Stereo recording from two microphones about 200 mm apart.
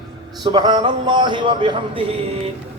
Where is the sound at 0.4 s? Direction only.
25° right (ahead or behind).